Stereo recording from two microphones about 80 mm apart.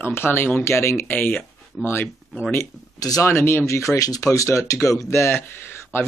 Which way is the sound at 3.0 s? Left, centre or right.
Left.